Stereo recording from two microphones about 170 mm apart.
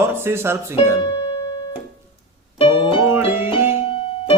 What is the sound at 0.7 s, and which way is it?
Keyboard, 25° left (ahead or behind).